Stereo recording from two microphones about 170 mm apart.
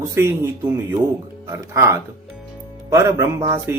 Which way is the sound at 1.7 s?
15° right (ahead or behind).